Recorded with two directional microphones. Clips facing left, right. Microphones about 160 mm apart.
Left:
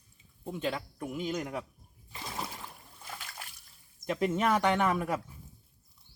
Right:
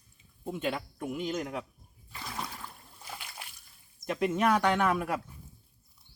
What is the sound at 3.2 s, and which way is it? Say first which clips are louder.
Water: even; 15° right (ahead or behind).